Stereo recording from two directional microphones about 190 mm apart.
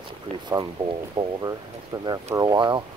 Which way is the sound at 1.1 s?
20° right (ahead or behind).